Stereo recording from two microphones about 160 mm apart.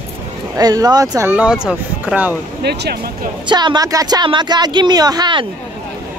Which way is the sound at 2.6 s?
85° right.